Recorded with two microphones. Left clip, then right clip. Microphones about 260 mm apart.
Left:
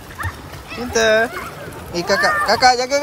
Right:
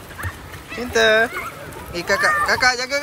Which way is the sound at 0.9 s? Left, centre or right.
Centre.